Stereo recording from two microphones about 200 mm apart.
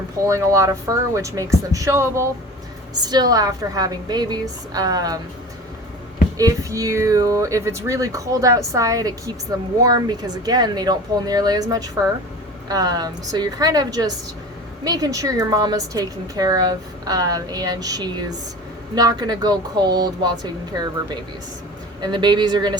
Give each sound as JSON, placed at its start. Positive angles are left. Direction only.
{"t": 0.3, "sound": "a woman's voice", "side_deg": -15}
{"t": 6.3, "sound": "a woman's voice", "side_deg": -15}
{"t": 12.6, "sound": "a woman's voice", "side_deg": -20}
{"t": 22.0, "sound": "a woman's voice", "side_deg": -20}